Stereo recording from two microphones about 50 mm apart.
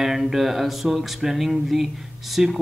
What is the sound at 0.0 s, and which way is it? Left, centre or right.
Music, centre.